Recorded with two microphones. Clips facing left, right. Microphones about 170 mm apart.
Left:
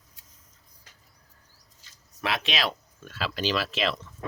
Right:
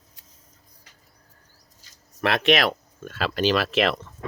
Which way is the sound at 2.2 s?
60° right (ahead or behind).